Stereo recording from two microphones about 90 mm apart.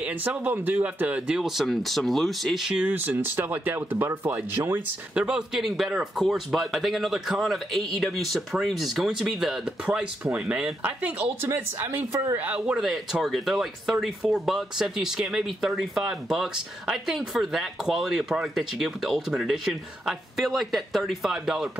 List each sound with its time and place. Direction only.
0.0 s speech: 15° right (ahead or behind)
2.9 s speech: 25° right (ahead or behind)
5.1 s speech: 10° right (ahead or behind)
12.4 s speech: 15° right (ahead or behind)